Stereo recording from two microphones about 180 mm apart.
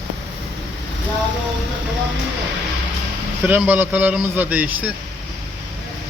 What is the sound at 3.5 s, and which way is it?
A man's voice, 10° right (ahead or behind).